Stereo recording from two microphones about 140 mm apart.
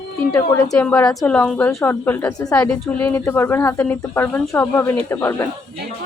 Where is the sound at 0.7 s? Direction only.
10° left (ahead or behind).